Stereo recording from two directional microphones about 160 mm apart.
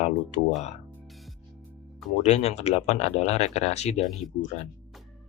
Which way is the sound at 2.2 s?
40° left (ahead or behind).